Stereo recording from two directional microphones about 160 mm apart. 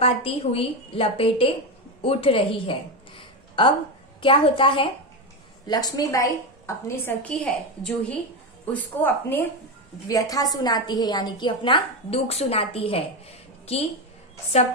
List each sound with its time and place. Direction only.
0.0 s a woman's voice: 35° left (ahead or behind)
3.2 s a sound: 30° left (ahead or behind)
4.2 s a woman's voice: 35° left (ahead or behind); by 9.5 s 10° left (ahead or behind)
10.0 s a woman's voice: 20° left (ahead or behind); by 13.8 s 40° left (ahead or behind)